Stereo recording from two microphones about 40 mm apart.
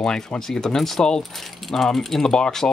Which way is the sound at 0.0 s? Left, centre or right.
Centre.